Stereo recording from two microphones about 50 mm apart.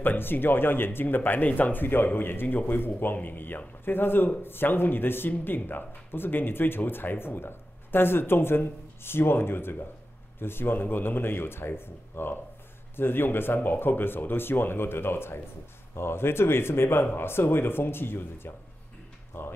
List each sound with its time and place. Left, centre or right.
0.0 s speech: left